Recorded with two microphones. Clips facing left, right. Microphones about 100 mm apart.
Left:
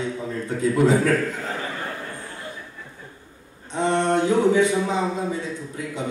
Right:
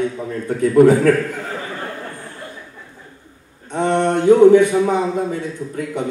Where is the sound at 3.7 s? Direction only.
55° right (ahead or behind).